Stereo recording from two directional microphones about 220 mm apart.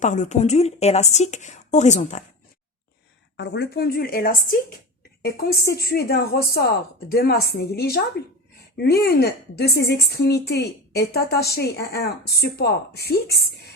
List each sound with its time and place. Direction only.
0.0 s speech: 35° left (ahead or behind)
3.3 s a woman's voice: 50° left (ahead or behind)
9.0 s a woman's voice: 45° left (ahead or behind)